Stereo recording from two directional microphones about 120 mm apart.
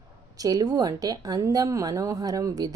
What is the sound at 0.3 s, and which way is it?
A woman's voice, 30° right (ahead or behind).